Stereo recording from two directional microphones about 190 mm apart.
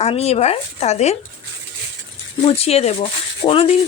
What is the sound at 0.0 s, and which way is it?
Speech, 35° left (ahead or behind).